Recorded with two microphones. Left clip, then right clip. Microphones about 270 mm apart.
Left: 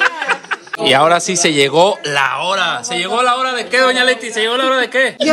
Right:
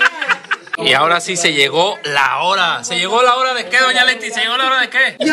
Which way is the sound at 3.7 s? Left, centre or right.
Left.